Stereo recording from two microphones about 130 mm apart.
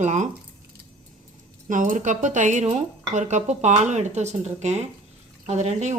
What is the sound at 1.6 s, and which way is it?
Speech, 85° right.